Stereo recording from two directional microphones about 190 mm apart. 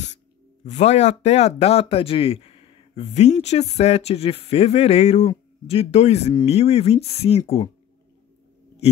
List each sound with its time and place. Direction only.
0.7 s speech: 35° left (ahead or behind)